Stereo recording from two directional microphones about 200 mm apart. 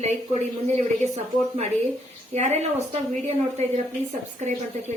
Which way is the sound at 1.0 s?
35° right (ahead or behind).